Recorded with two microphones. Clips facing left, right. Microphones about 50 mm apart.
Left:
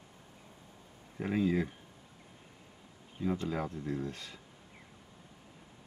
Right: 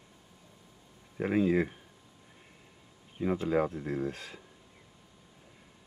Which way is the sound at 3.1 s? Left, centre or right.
Right.